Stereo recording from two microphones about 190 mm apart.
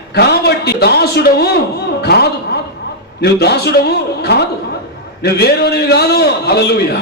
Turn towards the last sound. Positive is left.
turn(degrees=60)  # may be behind; listen again after turning